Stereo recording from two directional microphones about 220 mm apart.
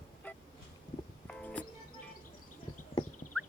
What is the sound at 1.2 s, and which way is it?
Music, 5° left (ahead or behind).